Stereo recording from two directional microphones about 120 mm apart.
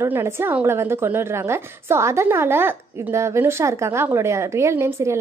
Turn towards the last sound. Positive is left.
turn(degrees=-20)  # may be behind; listen again after turning